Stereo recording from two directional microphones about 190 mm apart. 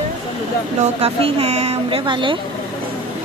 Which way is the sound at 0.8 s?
30° right (ahead or behind).